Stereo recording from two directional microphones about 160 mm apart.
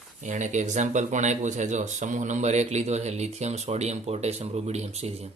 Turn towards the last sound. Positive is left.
turn(degrees=-40)  # may be behind; listen again after turning